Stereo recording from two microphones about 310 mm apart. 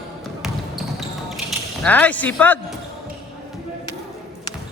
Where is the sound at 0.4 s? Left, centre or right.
Centre.